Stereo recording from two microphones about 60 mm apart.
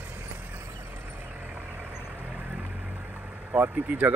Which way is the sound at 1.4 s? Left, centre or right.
Right.